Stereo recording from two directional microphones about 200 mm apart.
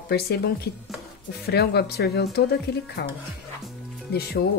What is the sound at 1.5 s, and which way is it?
A woman's voice, 55° left (ahead or behind).